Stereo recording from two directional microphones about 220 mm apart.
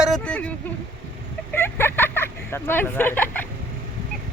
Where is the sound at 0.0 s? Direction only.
5° left (ahead or behind).